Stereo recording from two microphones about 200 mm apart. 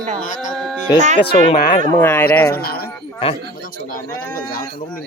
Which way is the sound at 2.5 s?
50° left (ahead or behind).